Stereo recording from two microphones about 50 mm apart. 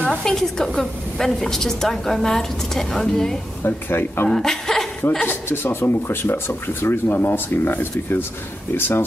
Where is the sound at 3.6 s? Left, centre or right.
Left.